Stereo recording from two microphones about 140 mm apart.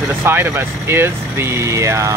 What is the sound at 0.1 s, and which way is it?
Speech, 15° right (ahead or behind).